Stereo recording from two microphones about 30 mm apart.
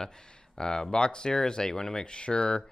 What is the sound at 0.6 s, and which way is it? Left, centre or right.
Speech, left.